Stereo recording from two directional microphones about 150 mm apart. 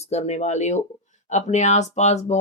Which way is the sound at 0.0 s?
45° left (ahead or behind).